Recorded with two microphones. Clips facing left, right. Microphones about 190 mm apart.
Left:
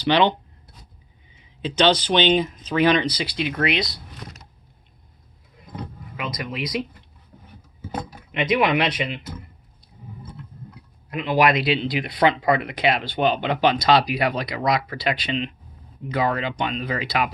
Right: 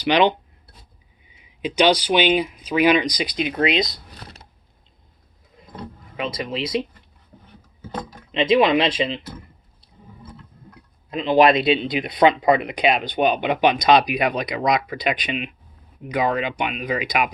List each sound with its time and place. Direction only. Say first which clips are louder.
0.0 s speech: right 1 dB; 15° right (ahead or behind)
6.1 s speech: right 3 dB; 25° right (ahead or behind)
8.3 s speech: right 4 dB; 25° right (ahead or behind)
11.1 s speech: right 4 dB; 25° right (ahead or behind)